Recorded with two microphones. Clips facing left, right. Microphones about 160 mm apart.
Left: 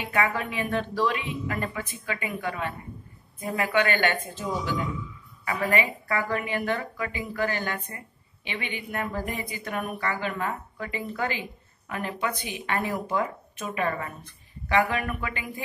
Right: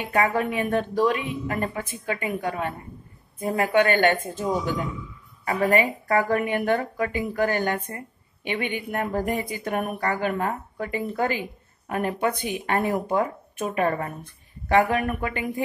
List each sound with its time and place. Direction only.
0.0 s speech: 50° right (ahead or behind)